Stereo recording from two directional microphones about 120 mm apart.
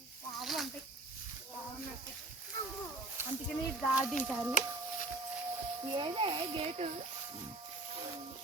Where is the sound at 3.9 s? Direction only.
5° right (ahead or behind).